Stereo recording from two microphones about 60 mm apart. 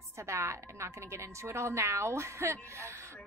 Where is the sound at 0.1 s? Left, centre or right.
Right.